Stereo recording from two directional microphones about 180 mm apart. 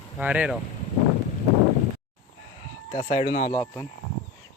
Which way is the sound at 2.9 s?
40° left (ahead or behind).